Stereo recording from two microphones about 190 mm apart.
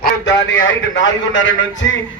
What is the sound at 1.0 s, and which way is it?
Speech, 75° left (ahead or behind).